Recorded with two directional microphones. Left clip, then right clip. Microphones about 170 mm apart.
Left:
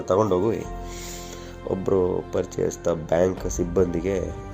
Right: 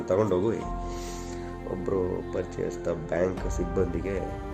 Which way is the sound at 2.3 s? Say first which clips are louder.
Left 6 dB; 30° left (ahead or behind).